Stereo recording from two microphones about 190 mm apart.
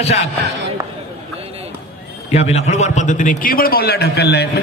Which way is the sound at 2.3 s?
35° left (ahead or behind).